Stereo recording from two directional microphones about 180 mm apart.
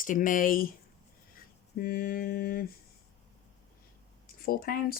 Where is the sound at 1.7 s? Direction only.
55° left (ahead or behind).